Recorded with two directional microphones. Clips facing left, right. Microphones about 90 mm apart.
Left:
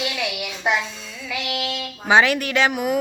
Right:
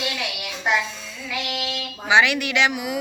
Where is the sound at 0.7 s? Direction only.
Centre (ahead or behind).